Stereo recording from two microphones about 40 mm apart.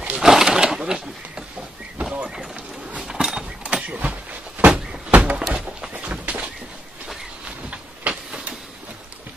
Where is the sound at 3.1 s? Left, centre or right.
Centre.